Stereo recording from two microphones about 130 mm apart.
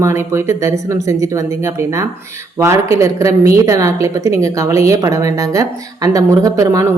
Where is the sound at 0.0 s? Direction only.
20° right (ahead or behind).